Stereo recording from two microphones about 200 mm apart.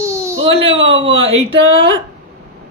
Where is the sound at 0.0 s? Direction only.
15° right (ahead or behind).